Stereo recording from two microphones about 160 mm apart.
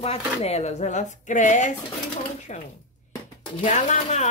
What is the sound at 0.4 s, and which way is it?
Rub, 40° left (ahead or behind).